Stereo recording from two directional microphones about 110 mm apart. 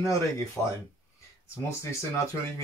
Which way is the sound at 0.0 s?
30° left (ahead or behind).